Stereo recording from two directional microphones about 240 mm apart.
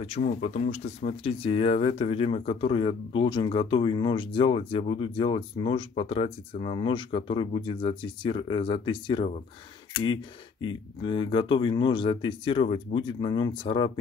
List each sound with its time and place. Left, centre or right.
0.0 s speech: left
10.6 s speech: centre